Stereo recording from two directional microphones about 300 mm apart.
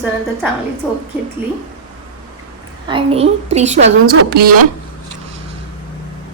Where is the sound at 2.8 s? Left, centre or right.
Centre.